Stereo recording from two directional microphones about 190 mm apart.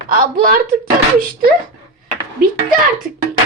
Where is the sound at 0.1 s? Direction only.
45° right (ahead or behind).